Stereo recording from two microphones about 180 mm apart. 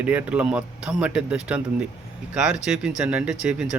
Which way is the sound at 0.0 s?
5° right (ahead or behind).